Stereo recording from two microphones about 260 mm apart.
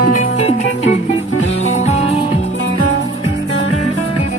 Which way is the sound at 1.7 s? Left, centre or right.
Left.